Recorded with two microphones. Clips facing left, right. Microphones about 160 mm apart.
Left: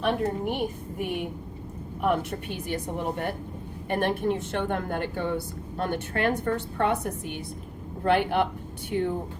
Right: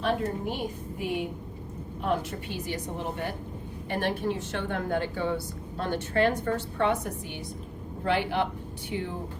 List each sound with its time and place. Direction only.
0.0 s a woman's voice: 60° left (ahead or behind)